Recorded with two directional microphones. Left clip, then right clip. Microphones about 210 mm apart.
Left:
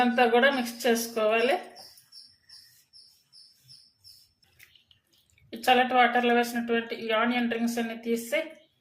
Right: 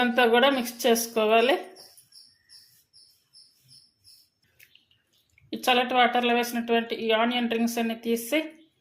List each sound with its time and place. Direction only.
0.0 s speech: 35° right (ahead or behind)
5.5 s speech: 40° right (ahead or behind)